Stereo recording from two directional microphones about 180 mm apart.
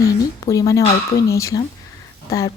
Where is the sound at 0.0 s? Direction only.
20° left (ahead or behind).